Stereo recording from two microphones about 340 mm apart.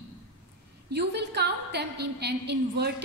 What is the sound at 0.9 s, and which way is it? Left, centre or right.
A woman's voice, right.